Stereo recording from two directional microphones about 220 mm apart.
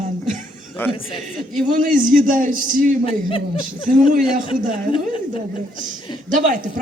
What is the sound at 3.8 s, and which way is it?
Speech, 35° right (ahead or behind).